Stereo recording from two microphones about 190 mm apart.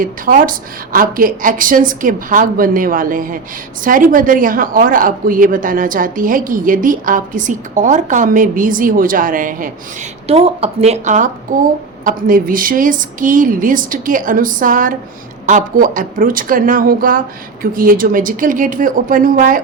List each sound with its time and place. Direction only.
0.0 s a woman's voice: 45° right (ahead or behind)
10.2 s a woman's voice: 30° right (ahead or behind)